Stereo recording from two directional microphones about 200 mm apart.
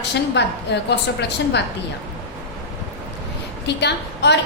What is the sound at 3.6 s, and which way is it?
Speech, 60° left (ahead or behind).